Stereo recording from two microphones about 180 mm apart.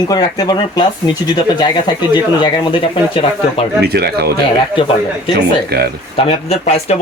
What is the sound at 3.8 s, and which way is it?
Speech, 60° right (ahead or behind).